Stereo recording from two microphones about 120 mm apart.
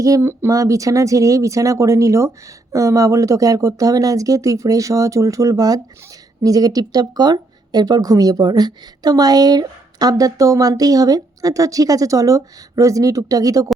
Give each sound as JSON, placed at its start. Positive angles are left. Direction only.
{"t": 0.0, "sound": "speech", "side_deg": -25}